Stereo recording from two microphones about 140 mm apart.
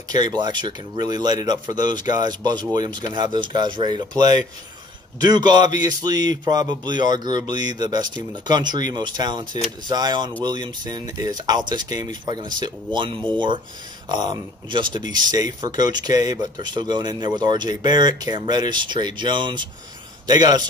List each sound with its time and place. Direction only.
0.1 s a man's voice: 30° right (ahead or behind)